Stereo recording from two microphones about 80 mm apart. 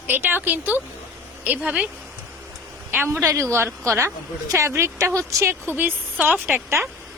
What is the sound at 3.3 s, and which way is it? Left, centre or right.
A woman's voice, right.